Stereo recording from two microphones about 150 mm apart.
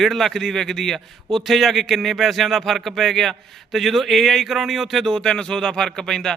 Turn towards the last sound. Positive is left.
turn(degrees=5)  # may be behind; listen again after turning